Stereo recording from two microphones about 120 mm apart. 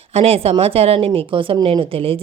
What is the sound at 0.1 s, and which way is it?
Speech, 55° right (ahead or behind).